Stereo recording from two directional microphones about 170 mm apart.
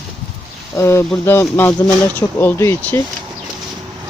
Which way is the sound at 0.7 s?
15° left (ahead or behind).